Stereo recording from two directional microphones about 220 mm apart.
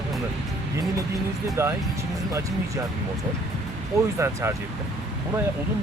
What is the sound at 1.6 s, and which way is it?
Speech, 10° right (ahead or behind).